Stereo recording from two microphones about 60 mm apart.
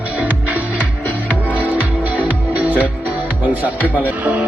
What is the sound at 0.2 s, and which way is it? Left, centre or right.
Music, right.